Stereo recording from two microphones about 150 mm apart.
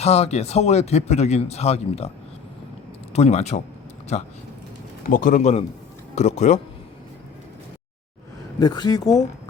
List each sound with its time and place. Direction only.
0.0 s speech: 45° left (ahead or behind)
3.1 s speech: 45° left (ahead or behind)
5.0 s speech: 65° left (ahead or behind); by 6.6 s 50° left (ahead or behind)
8.5 s speech: 25° left (ahead or behind)